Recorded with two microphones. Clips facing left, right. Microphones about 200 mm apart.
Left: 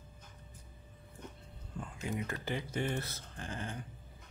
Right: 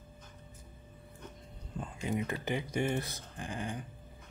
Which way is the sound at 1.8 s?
20° right (ahead or behind).